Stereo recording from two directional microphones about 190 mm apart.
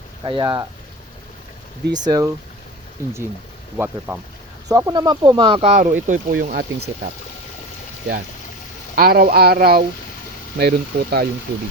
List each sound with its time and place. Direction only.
0.3 s speech: 25° right (ahead or behind)
1.9 s speech: 20° right (ahead or behind)
3.8 s speech: 10° right (ahead or behind); by 5.7 s 25° right (ahead or behind)
5.7 s speech: 40° right (ahead or behind)
9.0 s speech: 50° right (ahead or behind)